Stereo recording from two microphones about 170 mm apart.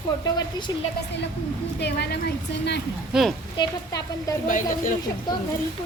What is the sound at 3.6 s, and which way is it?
Speech, 20° left (ahead or behind).